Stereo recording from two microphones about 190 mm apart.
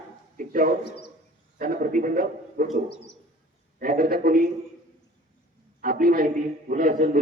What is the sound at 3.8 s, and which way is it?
Speech, 50° right (ahead or behind).